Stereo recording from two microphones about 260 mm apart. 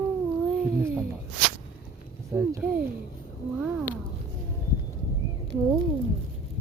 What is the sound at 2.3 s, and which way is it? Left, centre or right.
Speech, centre.